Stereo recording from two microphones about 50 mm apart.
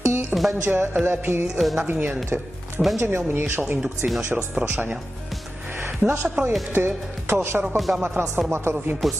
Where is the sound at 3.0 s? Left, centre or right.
Right.